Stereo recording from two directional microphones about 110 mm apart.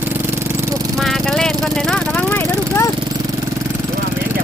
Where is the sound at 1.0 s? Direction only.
5° left (ahead or behind).